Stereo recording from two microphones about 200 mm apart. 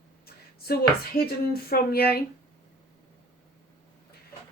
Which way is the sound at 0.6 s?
50° left (ahead or behind).